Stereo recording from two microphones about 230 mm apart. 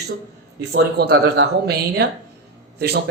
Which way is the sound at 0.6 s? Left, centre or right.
Right.